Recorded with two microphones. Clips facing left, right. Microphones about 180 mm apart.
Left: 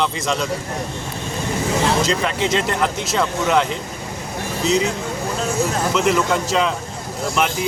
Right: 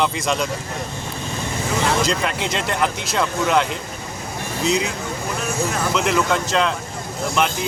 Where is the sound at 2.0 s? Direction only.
Centre (ahead or behind).